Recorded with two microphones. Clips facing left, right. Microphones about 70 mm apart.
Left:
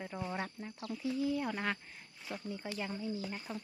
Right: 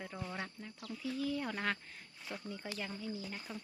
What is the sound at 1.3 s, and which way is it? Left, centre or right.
Speech, centre.